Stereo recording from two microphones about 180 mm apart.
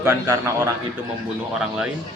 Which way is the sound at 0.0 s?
15° right (ahead or behind).